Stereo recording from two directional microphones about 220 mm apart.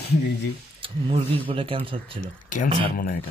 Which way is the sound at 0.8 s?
25° right (ahead or behind).